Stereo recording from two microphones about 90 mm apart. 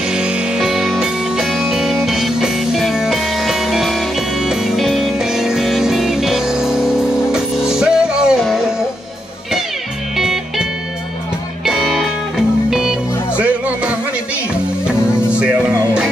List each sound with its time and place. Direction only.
0.1 s music: 5° right (ahead or behind)
10.1 s music: 5° right (ahead or behind)